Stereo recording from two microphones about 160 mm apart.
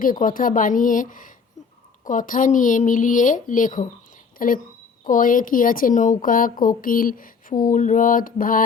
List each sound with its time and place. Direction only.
0.0 s speech: 55° left (ahead or behind)